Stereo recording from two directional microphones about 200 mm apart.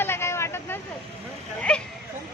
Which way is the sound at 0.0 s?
10° left (ahead or behind).